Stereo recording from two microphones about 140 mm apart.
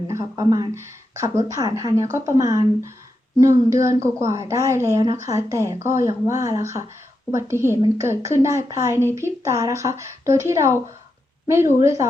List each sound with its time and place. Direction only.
0.1 s speech: 25° right (ahead or behind)